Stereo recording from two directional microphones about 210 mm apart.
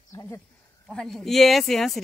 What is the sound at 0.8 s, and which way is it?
Speech, centre (ahead or behind).